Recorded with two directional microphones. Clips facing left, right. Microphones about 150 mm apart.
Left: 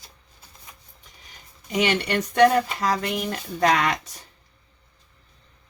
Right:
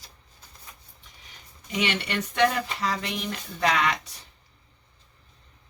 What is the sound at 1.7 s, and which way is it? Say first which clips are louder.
Speech: left 5 dB; 45° left (ahead or behind).